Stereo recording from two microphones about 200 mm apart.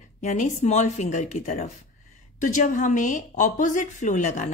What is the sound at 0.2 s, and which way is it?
A woman's voice, 35° left (ahead or behind).